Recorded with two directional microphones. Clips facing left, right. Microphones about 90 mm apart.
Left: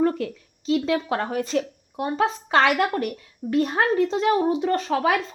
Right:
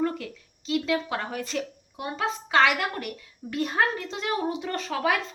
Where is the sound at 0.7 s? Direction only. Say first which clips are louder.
Left 4 dB; 35° left (ahead or behind).